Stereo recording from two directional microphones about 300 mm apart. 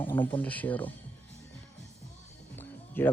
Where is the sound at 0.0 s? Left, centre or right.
Centre.